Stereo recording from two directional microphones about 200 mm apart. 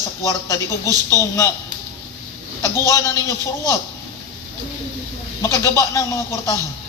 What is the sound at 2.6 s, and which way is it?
Speech, 15° left (ahead or behind).